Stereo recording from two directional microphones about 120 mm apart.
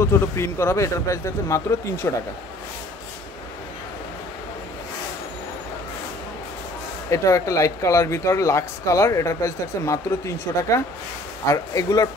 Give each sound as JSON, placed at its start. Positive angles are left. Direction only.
{"t": 0.0, "sound": "speech", "side_deg": 20}
{"t": 7.1, "sound": "speech", "side_deg": 25}
{"t": 11.4, "sound": "speech", "side_deg": 30}